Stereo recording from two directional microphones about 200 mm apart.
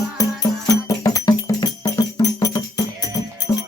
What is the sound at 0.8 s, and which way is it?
Music, 15° left (ahead or behind).